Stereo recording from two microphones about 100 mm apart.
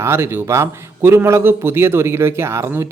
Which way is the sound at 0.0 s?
25° right (ahead or behind).